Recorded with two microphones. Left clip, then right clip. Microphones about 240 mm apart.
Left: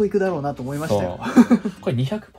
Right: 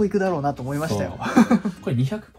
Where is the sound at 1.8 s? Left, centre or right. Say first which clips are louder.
Left 3 dB; left.